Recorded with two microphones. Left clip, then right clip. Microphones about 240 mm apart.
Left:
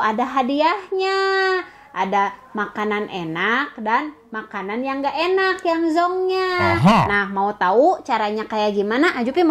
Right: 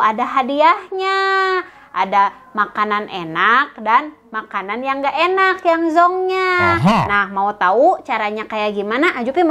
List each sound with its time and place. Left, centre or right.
0.0 s a woman's voice: right
6.6 s speech: centre
7.1 s a woman's voice: right